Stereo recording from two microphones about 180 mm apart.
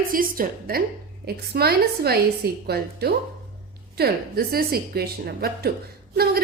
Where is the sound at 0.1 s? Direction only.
50° right (ahead or behind).